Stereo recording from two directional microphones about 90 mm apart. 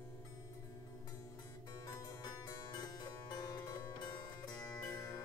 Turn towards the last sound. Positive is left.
turn(degrees=45)  # may be behind; listen again after turning